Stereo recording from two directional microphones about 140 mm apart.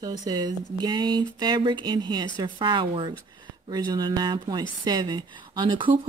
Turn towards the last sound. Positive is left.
turn(degrees=-35)  # may be behind; listen again after turning